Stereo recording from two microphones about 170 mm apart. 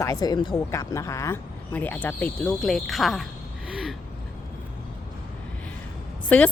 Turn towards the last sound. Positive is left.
turn(degrees=5)  # may be behind; listen again after turning